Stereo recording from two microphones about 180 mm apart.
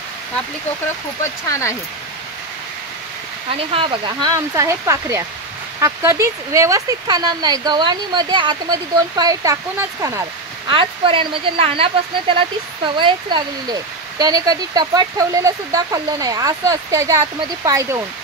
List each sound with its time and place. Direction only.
1.2 s speech: 15° left (ahead or behind)
3.7 s speech: 30° right (ahead or behind)
10.7 s speech: 30° right (ahead or behind)